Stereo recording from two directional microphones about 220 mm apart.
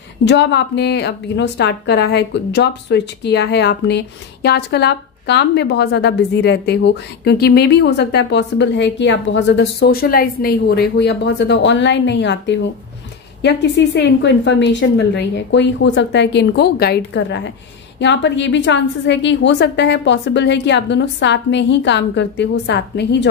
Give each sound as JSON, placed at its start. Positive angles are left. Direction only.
{"t": 0.2, "sound": "speech", "side_deg": 50}